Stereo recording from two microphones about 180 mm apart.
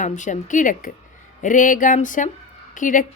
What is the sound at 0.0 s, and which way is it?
A woman's voice, 45° left (ahead or behind).